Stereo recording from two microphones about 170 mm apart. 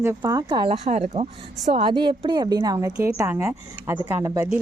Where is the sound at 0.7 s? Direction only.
40° right (ahead or behind).